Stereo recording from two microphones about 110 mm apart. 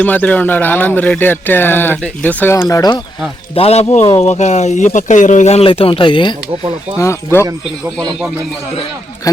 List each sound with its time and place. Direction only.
0.0 s speech: 15° left (ahead or behind)
2.6 s speech: 30° left (ahead or behind)
3.5 s speech: 65° left (ahead or behind); by 5.6 s 90° left
5.6 s speech: 55° left (ahead or behind)
7.0 s speech: 25° left (ahead or behind)
9.3 s speech: 30° left (ahead or behind)